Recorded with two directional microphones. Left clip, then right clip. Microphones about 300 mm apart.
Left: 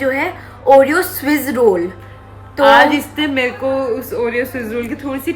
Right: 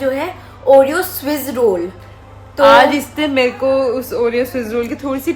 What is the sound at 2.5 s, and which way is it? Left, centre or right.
Music, centre.